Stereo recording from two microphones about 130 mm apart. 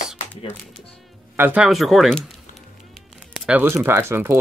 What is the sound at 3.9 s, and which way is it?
Speech, 20° right (ahead or behind).